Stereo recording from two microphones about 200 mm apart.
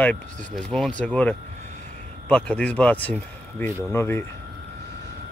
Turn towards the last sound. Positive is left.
turn(degrees=10)  # may be behind; listen again after turning